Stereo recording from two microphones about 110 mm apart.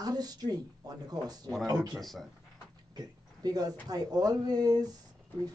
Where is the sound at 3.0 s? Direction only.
35° right (ahead or behind).